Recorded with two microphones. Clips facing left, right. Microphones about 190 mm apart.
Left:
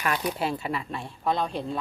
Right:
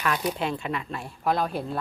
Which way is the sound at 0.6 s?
Centre (ahead or behind).